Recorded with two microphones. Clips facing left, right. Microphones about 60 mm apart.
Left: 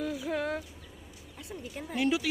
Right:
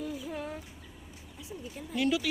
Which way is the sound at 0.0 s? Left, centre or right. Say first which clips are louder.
Left 5 dB; left.